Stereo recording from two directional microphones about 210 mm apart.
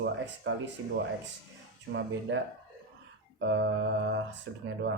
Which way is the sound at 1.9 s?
55° right (ahead or behind).